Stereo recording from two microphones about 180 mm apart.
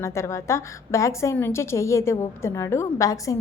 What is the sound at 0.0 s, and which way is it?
A woman's voice, 15° left (ahead or behind).